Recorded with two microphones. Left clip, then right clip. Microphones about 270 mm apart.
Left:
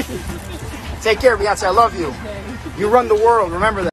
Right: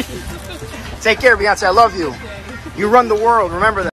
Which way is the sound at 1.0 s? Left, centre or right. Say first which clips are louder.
Right 2 dB; right.